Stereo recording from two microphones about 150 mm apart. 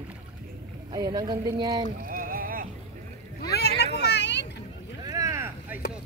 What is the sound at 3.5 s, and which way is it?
Boat, 90° left.